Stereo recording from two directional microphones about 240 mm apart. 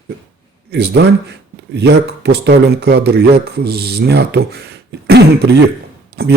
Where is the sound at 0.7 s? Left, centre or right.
Right.